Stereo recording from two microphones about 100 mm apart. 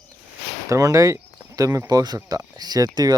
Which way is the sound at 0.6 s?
35° right (ahead or behind).